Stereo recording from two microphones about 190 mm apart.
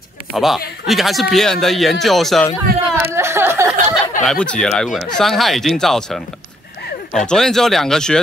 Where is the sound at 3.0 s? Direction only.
15° right (ahead or behind).